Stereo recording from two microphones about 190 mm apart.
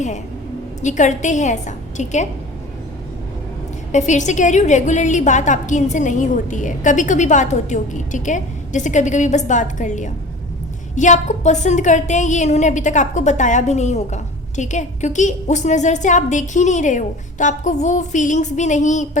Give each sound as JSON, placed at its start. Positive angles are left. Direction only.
{"t": 0.8, "sound": "a woman's voice", "side_deg": 40}
{"t": 3.9, "sound": "a woman's voice", "side_deg": 40}